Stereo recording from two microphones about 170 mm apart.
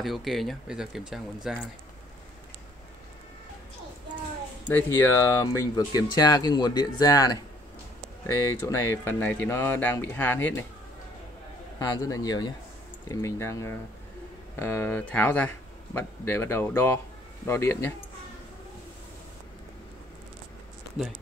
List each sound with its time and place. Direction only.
0.0 s speech: centre (ahead or behind)
4.6 s speech: 10° left (ahead or behind)
11.8 s speech: 20° left (ahead or behind)